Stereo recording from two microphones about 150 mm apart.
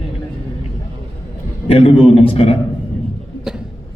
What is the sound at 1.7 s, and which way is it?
Speech, 40° left (ahead or behind).